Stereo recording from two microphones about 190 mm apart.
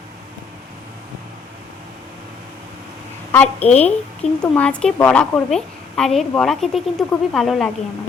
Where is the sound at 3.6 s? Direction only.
35° left (ahead or behind).